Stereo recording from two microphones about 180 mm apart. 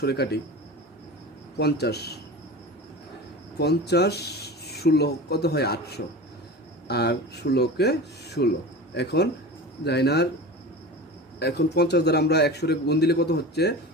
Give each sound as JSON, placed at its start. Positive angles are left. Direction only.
{"t": 0.0, "sound": "a man's voice", "side_deg": 65}
{"t": 1.5, "sound": "a man's voice", "side_deg": 65}
{"t": 3.6, "sound": "a man's voice", "side_deg": 65}
{"t": 11.3, "sound": "a man's voice", "side_deg": 65}